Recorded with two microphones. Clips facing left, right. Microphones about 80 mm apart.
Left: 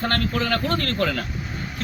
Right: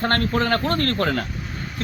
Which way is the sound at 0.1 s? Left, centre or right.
Right.